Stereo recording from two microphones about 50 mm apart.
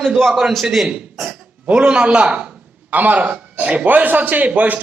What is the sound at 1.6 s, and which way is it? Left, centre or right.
Speech, centre.